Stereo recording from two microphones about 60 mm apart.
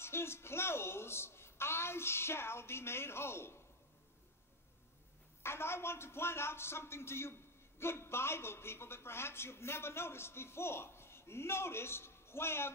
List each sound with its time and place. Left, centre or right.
0.0 s a woman's voice: left
5.4 s a man's voice: left